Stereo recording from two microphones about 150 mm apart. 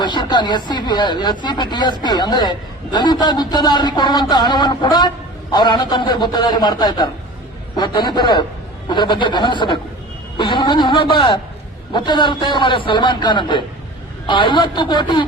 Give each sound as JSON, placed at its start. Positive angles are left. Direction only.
{"t": 0.0, "sound": "a man's voice", "side_deg": 30}